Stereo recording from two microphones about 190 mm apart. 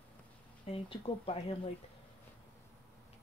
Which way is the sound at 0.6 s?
30° left (ahead or behind).